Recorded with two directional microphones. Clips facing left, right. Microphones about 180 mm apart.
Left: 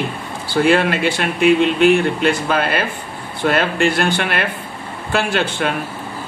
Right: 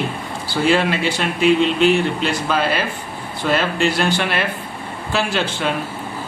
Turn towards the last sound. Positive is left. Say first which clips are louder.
# left 2 dB
turn(degrees=55)  # may be behind; listen again after turning